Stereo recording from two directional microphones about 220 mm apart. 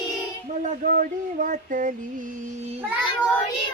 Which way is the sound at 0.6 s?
35° right (ahead or behind).